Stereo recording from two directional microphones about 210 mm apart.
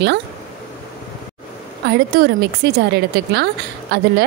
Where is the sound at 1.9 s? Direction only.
50° right (ahead or behind).